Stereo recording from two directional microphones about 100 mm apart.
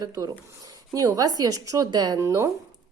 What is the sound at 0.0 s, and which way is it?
Speech, 35° right (ahead or behind).